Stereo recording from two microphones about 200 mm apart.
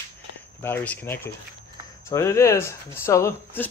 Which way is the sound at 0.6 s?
10° left (ahead or behind).